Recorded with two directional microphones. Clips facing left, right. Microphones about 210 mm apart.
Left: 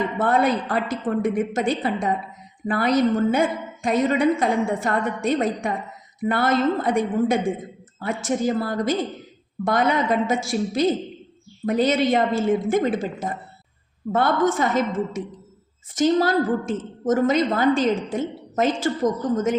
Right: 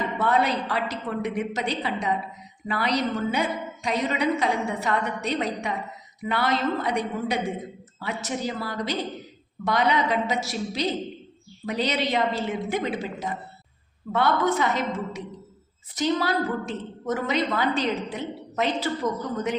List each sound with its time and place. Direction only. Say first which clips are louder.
0.2 s a woman's voice: left 3 dB; 50° left (ahead or behind)